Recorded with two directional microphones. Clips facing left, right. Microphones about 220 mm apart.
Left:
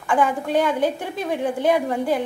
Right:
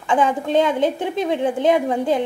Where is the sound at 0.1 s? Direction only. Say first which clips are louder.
Right 2 dB; 20° right (ahead or behind).